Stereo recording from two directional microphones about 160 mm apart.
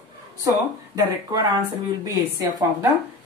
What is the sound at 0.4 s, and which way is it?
Speech, 20° right (ahead or behind).